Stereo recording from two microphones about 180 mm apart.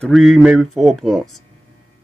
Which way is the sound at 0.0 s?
Centre (ahead or behind).